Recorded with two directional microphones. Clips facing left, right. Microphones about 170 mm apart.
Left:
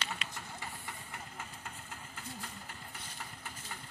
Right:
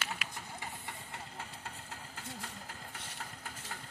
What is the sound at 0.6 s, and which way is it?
Steam, 25° right (ahead or behind).